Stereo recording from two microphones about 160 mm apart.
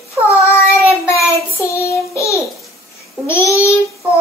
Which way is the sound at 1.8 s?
20° left (ahead or behind).